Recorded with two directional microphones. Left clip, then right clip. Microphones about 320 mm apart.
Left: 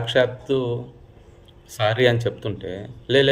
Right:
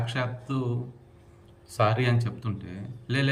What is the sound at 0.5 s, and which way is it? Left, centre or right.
Speech, right.